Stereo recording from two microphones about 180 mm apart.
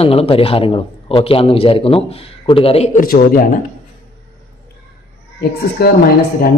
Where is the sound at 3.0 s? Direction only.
55° left (ahead or behind).